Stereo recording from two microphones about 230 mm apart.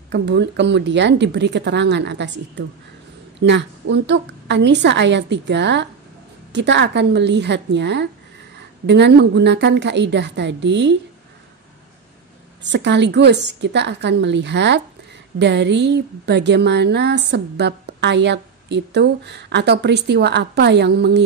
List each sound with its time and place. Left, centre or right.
0.1 s speech: right
12.7 s speech: right